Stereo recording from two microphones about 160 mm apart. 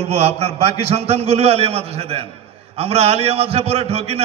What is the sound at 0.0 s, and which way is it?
A man's voice, 40° right (ahead or behind).